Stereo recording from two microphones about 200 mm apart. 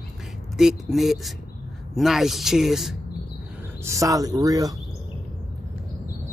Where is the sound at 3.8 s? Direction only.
15° right (ahead or behind).